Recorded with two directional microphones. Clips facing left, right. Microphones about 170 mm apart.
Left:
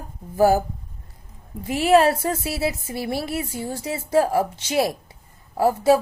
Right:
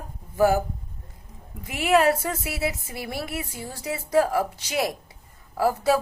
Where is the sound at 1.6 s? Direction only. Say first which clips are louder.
Left 4 dB; 30° left (ahead or behind).